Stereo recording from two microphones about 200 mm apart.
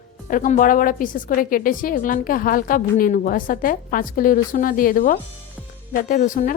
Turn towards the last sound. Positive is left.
turn(degrees=40)  # may be behind; listen again after turning